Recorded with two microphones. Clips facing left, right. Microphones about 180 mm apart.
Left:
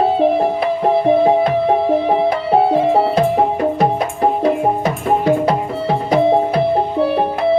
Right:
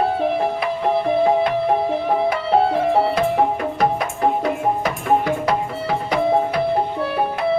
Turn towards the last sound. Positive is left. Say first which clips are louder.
# left 5 dB
turn(degrees=30)  # may be behind; listen again after turning